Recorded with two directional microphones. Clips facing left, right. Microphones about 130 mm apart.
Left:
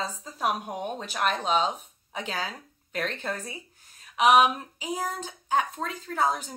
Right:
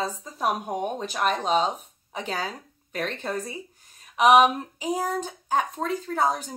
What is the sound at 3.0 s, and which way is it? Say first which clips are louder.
Speech: right 1 dB; 15° right (ahead or behind).